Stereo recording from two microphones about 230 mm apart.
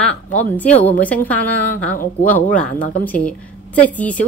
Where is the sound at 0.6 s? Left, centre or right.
Centre.